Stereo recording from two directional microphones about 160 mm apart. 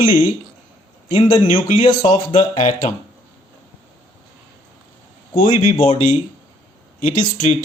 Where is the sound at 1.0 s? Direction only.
35° left (ahead or behind).